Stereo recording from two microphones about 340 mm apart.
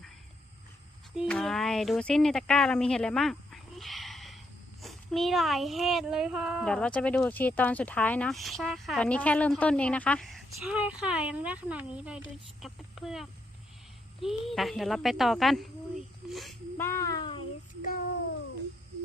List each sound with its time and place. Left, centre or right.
1.1 s speech: centre
17.8 s child singing: left